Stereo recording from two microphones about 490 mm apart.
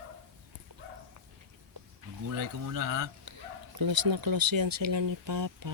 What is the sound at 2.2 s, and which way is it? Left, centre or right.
Speech, right.